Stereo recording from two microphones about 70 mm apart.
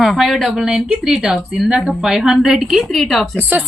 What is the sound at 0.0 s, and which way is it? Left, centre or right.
Speech, centre.